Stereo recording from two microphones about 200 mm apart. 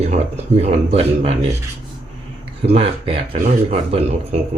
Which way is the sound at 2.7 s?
30° right (ahead or behind).